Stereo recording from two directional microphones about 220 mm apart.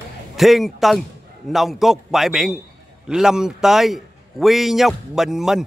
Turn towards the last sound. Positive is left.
turn(degrees=0)  # may be behind; listen again after turning